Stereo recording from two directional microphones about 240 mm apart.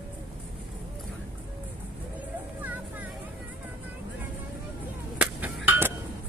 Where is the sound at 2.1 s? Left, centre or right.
Centre.